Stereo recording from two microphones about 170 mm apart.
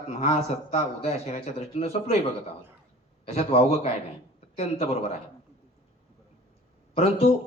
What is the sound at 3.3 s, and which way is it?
A man's voice, 40° left (ahead or behind).